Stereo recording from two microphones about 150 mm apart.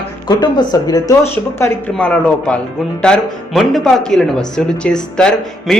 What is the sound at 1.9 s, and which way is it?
A man's voice, 5° left (ahead or behind).